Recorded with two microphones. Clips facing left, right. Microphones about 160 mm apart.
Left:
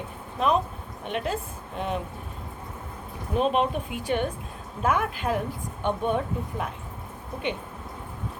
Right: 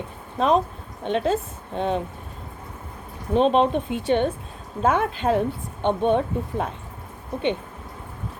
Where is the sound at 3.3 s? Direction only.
30° right (ahead or behind).